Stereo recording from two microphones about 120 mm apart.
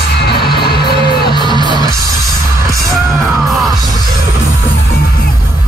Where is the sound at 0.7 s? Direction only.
45° right (ahead or behind).